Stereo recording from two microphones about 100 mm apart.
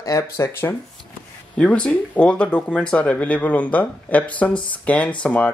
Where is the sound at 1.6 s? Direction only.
10° left (ahead or behind).